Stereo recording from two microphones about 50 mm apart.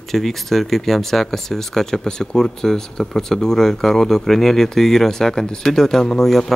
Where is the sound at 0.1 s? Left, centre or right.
Centre.